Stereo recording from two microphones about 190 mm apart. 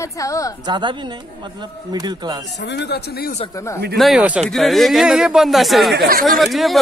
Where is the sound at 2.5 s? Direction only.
65° left (ahead or behind).